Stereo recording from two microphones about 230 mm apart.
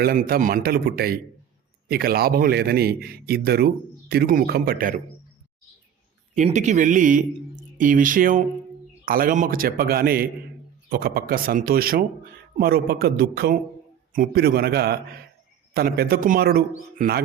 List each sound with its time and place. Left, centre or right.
0.0 s a man's voice: right
6.3 s a man's voice: right